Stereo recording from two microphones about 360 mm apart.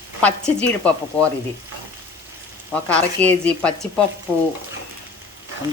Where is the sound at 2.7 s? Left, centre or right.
Centre.